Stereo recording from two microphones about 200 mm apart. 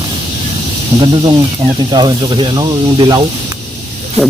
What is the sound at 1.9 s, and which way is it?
Speech, 20° right (ahead or behind).